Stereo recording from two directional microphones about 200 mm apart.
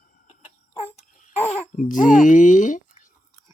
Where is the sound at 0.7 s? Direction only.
30° left (ahead or behind).